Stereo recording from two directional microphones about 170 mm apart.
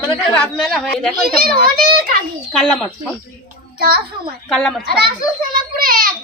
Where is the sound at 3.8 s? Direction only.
65° right (ahead or behind).